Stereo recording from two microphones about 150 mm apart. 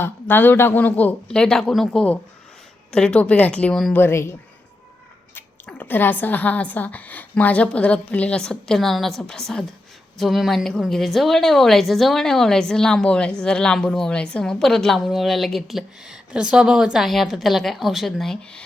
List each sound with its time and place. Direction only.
0.0 s speech: 15° left (ahead or behind)
3.9 s a woman's voice: 15° left (ahead or behind)